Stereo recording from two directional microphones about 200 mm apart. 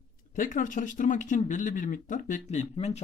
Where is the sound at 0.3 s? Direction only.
40° left (ahead or behind).